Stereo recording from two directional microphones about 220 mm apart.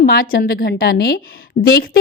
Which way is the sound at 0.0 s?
40° left (ahead or behind).